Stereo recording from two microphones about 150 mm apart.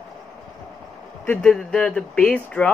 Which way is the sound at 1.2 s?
10° left (ahead or behind).